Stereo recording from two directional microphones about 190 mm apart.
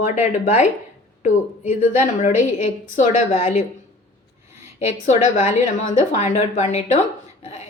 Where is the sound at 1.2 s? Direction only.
40° left (ahead or behind).